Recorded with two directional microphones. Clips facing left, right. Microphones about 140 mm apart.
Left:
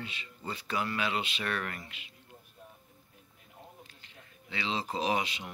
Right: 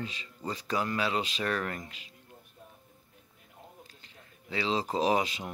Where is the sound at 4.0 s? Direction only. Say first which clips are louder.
Even; 35° right (ahead or behind).